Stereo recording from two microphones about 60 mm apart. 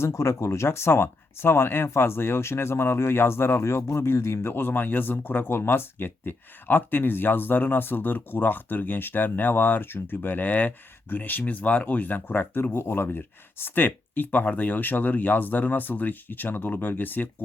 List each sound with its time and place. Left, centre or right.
0.0 s speech: left